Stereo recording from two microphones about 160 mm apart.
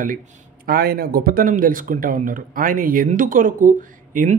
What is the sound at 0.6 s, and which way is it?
Speech, 75° right (ahead or behind).